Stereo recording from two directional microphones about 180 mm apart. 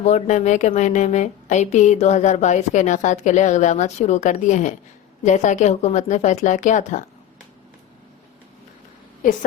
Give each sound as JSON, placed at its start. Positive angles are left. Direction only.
{"t": 0.0, "sound": "a woman's voice", "side_deg": 40}